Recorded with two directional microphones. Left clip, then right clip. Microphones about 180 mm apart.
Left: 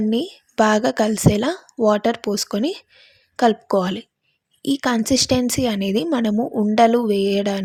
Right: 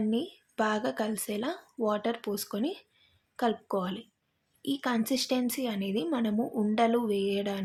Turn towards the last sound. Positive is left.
turn(degrees=40)  # may be behind; listen again after turning